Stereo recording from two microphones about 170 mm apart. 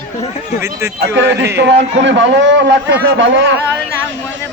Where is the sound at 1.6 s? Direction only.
90° right.